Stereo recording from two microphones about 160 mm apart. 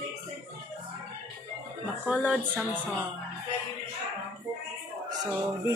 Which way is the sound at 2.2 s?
10° right (ahead or behind).